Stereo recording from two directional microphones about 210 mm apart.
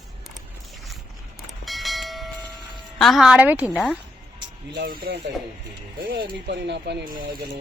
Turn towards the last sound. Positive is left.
turn(degrees=-55)  # may be behind; listen again after turning